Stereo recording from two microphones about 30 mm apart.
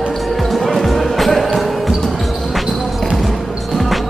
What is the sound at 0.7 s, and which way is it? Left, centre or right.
Music, centre.